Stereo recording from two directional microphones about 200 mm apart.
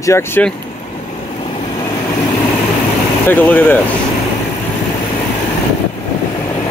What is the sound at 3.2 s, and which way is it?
Speech, 10° left (ahead or behind).